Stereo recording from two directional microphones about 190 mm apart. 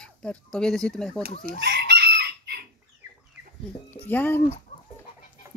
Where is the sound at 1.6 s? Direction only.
60° right (ahead or behind).